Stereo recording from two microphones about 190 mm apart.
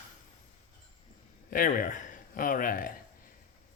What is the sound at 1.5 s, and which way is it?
Speech, 45° left (ahead or behind).